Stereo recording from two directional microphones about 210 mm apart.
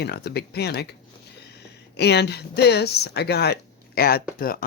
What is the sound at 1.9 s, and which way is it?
Speech, 50° left (ahead or behind).